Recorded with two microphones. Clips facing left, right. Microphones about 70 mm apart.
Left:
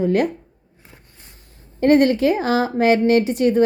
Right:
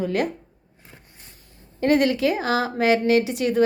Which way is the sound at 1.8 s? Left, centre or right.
Left.